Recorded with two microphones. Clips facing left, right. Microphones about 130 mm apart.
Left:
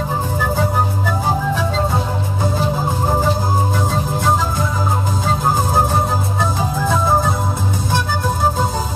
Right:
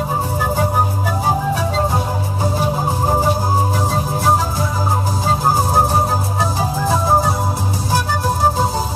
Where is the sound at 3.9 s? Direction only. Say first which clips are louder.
Right 2 dB; 35° right (ahead or behind).